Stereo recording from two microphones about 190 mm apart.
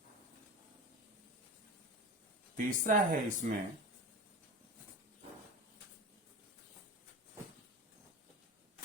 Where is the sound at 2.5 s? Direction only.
45° right (ahead or behind).